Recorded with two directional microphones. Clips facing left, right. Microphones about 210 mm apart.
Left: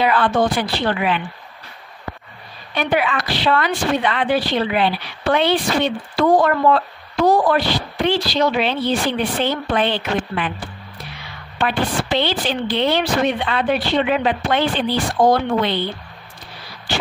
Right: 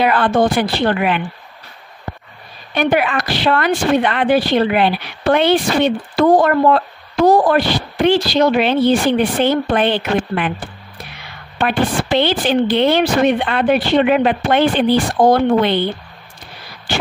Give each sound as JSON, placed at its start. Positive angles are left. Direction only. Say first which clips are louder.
{"t": 0.0, "sound": "a woman's voice", "louder": "right 3 dB", "side_deg": -50}
{"t": 2.7, "sound": "a woman's voice", "louder": "right 4 dB", "side_deg": -50}
{"t": 11.5, "sound": "a woman's voice", "louder": "right 3 dB", "side_deg": -55}